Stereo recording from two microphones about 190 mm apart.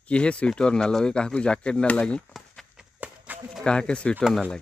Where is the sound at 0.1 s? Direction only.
5° left (ahead or behind).